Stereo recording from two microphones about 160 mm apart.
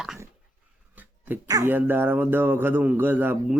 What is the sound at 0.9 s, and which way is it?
Dog, 10° right (ahead or behind).